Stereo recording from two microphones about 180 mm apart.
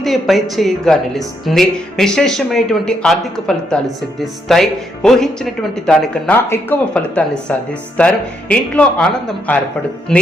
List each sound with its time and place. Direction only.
0.0 s speech: centre (ahead or behind)